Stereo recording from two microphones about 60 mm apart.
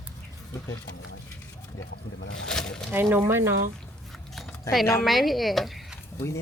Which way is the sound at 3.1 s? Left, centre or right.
Right.